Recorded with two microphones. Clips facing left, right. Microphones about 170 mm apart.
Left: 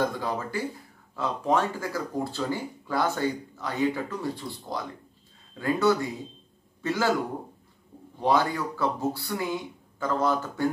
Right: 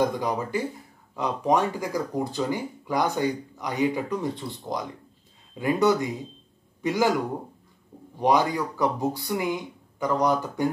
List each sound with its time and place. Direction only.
0.0 s a man's voice: 20° right (ahead or behind)
8.2 s speech: 15° right (ahead or behind)